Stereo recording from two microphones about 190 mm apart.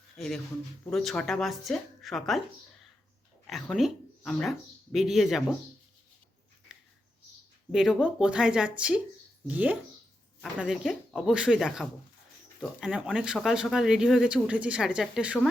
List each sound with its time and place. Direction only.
0.9 s speech: centre (ahead or behind)
3.4 s speech: centre (ahead or behind)
6.7 s a sound: 5° right (ahead or behind)
7.7 s speech: 5° right (ahead or behind)